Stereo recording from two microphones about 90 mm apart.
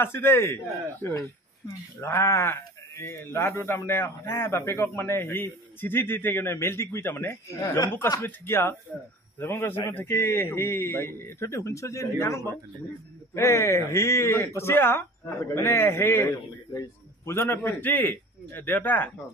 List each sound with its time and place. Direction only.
0.0 s speech: 25° left (ahead or behind)
2.0 s speech: 30° left (ahead or behind)